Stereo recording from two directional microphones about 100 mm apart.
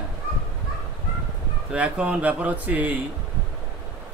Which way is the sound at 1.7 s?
10° right (ahead or behind).